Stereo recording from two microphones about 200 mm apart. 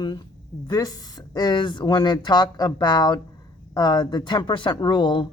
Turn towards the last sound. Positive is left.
turn(degrees=20)  # may be behind; listen again after turning